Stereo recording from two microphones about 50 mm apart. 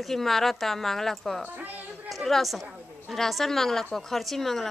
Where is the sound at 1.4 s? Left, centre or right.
Right.